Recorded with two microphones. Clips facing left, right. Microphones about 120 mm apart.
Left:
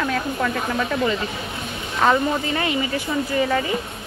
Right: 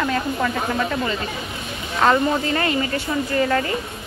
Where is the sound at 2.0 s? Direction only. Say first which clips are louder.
Right 1 dB; 5° left (ahead or behind).